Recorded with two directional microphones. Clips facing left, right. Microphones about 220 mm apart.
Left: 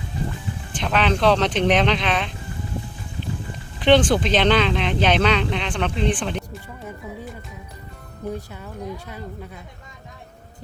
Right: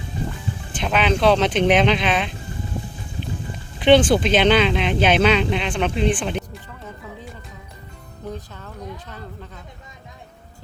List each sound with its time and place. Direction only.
0.8 s speech: 5° right (ahead or behind)
3.8 s speech: 5° right (ahead or behind)
8.3 s a woman's voice: 10° left (ahead or behind)